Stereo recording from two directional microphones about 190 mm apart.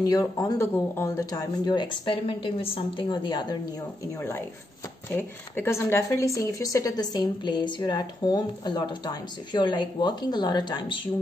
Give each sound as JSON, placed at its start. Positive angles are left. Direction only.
{"t": 0.0, "sound": "speech", "side_deg": 20}
{"t": 5.1, "sound": "speech", "side_deg": 10}